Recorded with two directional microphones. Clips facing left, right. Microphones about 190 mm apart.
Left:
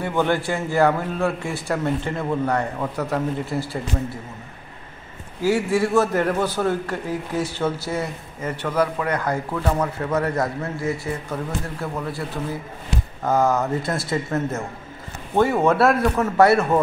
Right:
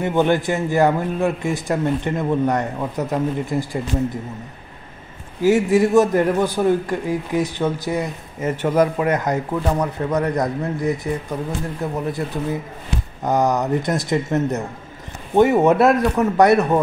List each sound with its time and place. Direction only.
0.0 s a man's voice: 20° right (ahead or behind)
5.4 s a man's voice: 20° right (ahead or behind)